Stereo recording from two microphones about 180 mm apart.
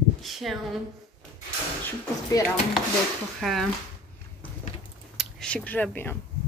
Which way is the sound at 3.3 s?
Centre (ahead or behind).